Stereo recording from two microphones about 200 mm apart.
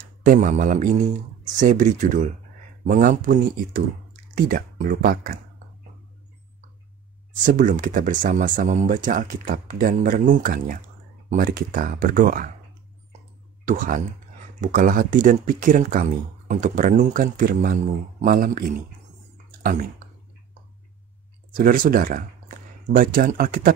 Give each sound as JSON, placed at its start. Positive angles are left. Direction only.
{"t": 0.2, "sound": "speech", "side_deg": -40}
{"t": 7.4, "sound": "speech", "side_deg": -40}
{"t": 13.7, "sound": "speech", "side_deg": -40}
{"t": 21.5, "sound": "speech", "side_deg": -45}